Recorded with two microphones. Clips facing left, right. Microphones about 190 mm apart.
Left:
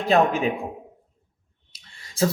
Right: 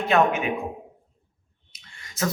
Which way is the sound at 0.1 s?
35° left (ahead or behind).